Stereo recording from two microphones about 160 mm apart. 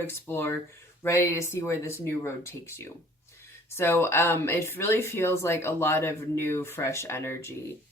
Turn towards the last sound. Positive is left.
turn(degrees=15)  # may be behind; listen again after turning